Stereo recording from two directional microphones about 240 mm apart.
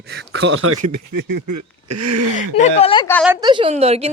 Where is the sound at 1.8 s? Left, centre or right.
Right.